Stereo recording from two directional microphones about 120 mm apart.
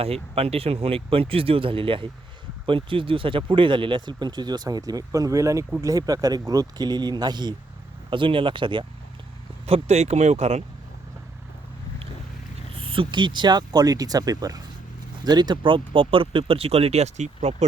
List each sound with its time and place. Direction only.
0.0 s speech: 55° right (ahead or behind)
9.6 s speech: 60° right (ahead or behind)
12.7 s speech: 50° right (ahead or behind); by 17.7 s 70° right (ahead or behind)